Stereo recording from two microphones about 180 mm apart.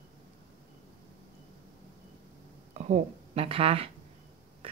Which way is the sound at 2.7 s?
40° right (ahead or behind).